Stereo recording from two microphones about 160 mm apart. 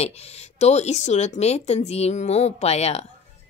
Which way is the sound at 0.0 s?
40° left (ahead or behind).